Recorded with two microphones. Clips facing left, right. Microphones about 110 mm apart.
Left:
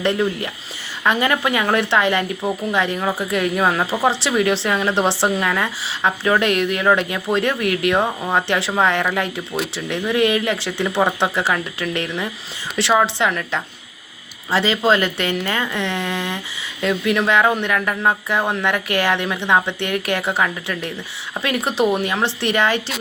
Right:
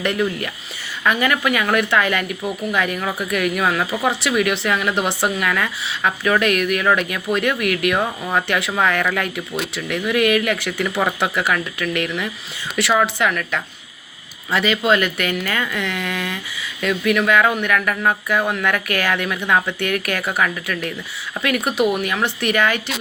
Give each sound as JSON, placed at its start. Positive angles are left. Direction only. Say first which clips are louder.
{"t": 0.0, "sound": "speech", "louder": "left 1 dB", "side_deg": 25}